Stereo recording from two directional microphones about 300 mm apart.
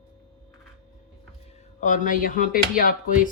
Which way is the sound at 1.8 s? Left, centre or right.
Left.